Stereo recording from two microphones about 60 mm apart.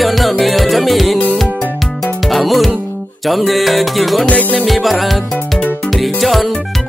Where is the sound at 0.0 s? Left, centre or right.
Centre.